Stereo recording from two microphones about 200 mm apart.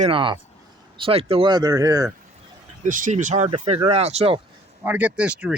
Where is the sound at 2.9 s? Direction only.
40° right (ahead or behind).